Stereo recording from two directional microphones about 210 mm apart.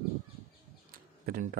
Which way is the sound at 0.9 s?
45° right (ahead or behind).